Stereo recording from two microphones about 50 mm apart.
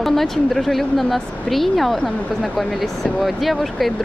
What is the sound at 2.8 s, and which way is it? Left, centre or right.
Speech, centre.